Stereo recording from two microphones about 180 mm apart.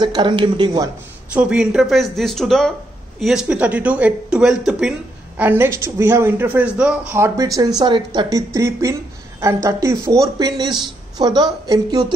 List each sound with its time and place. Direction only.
0.0 s a woman's voice: 25° right (ahead or behind)
1.3 s a woman's voice: 5° right (ahead or behind); by 12.1 s 20° right (ahead or behind)